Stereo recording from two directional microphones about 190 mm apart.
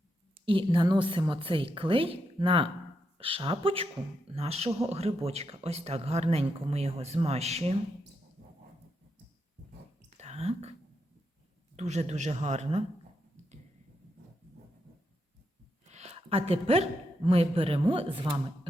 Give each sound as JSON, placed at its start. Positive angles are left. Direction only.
{"t": 0.4, "sound": "a woman's voice", "side_deg": -25}
{"t": 10.2, "sound": "whispering", "side_deg": -35}
{"t": 11.8, "sound": "speech", "side_deg": -35}
{"t": 15.9, "sound": "a woman's voice", "side_deg": -35}